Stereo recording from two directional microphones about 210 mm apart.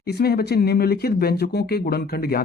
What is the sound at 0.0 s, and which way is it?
Speech, 50° left (ahead or behind).